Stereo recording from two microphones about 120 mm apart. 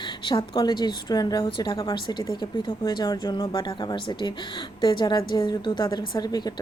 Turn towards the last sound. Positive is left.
turn(degrees=35)  # may be behind; listen again after turning